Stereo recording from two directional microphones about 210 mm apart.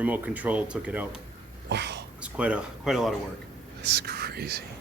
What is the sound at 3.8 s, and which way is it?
Speech, 50° right (ahead or behind).